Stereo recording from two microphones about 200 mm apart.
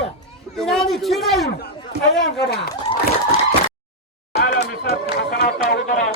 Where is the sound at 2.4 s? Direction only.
55° left (ahead or behind).